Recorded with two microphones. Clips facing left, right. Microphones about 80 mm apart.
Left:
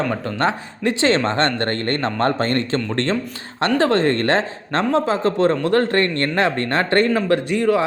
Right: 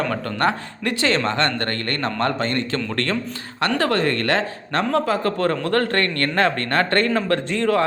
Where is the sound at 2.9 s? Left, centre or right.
Left.